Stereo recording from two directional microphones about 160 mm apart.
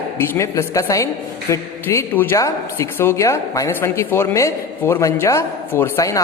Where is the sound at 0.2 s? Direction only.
20° left (ahead or behind).